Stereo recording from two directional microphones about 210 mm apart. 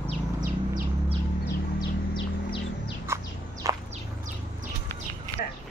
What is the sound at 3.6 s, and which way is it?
Walk, 15° right (ahead or behind).